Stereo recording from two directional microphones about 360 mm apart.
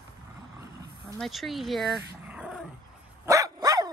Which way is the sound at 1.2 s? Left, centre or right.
Centre.